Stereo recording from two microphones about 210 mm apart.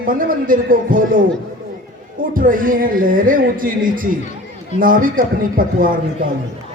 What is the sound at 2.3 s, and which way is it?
A man's voice, 40° right (ahead or behind).